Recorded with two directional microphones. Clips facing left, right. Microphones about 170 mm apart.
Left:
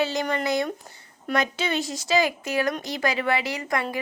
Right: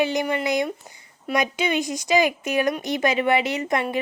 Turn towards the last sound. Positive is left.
turn(degrees=-20)  # may be behind; listen again after turning